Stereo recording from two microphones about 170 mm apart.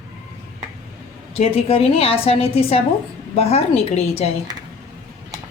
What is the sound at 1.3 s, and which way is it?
Speech, 35° left (ahead or behind).